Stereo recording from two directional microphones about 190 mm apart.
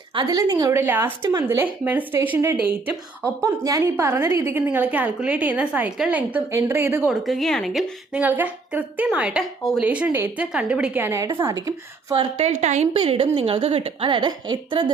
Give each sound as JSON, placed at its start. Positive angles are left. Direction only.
{"t": 0.1, "sound": "a woman's voice", "side_deg": -25}
{"t": 7.1, "sound": "a woman's voice", "side_deg": 0}